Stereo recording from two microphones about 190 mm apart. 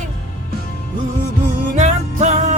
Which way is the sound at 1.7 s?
40° right (ahead or behind).